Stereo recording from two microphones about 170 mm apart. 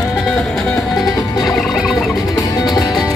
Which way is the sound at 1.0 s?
20° left (ahead or behind).